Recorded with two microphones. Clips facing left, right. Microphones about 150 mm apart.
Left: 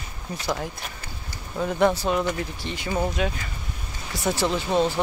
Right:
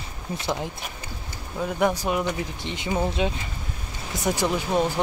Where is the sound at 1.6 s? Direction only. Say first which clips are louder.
Left 2 dB; 10° right (ahead or behind).